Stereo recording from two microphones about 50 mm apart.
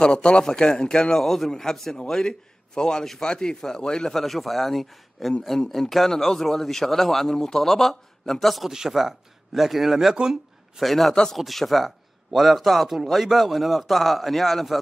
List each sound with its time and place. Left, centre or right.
0.0 s a man's voice: centre
8.6 s speech: centre
10.8 s speech: centre